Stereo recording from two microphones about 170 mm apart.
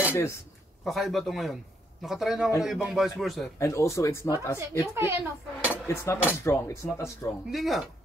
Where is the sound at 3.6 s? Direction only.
15° left (ahead or behind).